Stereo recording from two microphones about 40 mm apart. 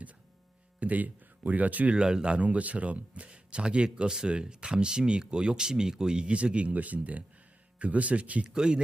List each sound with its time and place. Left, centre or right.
0.8 s speech: right
2.0 s speech: right
2.4 s speech: right
8.4 s speech: right